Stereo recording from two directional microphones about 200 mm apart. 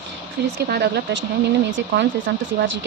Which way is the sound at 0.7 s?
55° right (ahead or behind).